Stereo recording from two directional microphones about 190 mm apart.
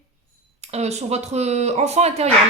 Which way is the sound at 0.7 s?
35° right (ahead or behind).